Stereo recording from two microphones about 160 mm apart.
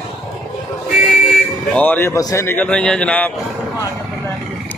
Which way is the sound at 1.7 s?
10° left (ahead or behind).